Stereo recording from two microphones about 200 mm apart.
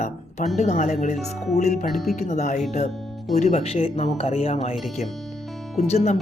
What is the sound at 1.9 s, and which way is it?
Speech, centre (ahead or behind).